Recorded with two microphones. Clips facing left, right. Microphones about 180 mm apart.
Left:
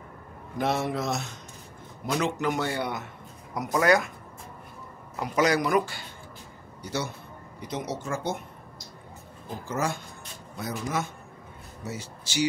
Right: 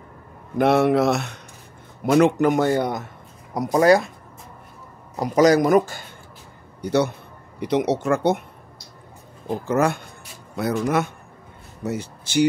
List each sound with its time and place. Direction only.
0.6 s a man's voice: 65° right (ahead or behind); by 3.0 s 45° right (ahead or behind)
3.5 s speech: 35° right (ahead or behind)
5.1 s a man's voice: 40° right (ahead or behind)
6.8 s a man's voice: 60° right (ahead or behind)
7.6 s speech: 70° right (ahead or behind)
9.7 s speech: 60° right (ahead or behind)